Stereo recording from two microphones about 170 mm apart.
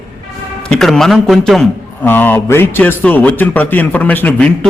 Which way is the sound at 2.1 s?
10° left (ahead or behind).